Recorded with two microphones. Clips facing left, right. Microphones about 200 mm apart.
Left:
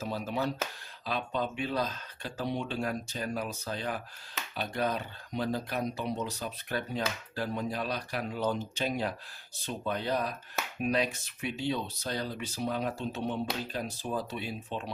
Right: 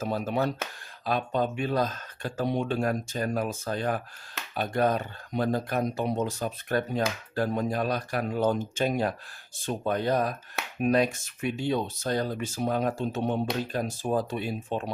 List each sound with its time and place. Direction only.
0.0 s speech: 55° right (ahead or behind)